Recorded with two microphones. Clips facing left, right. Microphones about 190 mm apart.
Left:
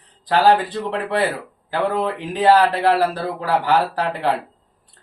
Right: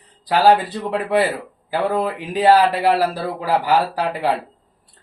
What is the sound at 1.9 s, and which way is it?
Speech, 10° right (ahead or behind).